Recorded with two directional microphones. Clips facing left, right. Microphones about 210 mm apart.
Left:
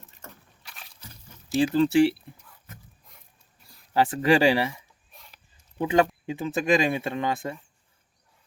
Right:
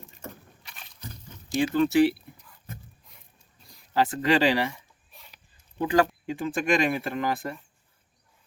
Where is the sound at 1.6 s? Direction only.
30° left (ahead or behind).